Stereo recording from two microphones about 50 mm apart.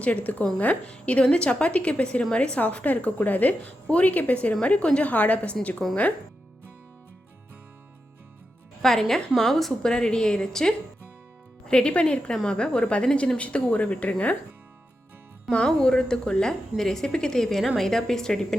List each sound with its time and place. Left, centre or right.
0.0 s a woman's voice: left
5.8 s speech: centre
8.8 s a woman's voice: centre
9.9 s a woman's voice: centre
15.5 s a woman's voice: centre